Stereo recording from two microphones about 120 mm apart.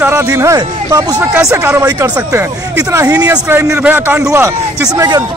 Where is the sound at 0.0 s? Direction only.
25° right (ahead or behind).